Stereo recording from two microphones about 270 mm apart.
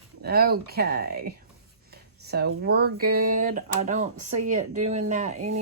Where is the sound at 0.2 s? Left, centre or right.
Right.